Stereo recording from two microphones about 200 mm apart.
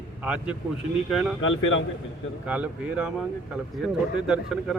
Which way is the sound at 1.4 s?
75° left (ahead or behind).